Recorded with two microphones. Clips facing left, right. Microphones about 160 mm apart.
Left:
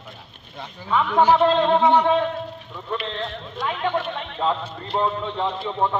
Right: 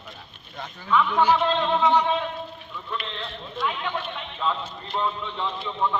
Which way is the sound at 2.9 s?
40° left (ahead or behind).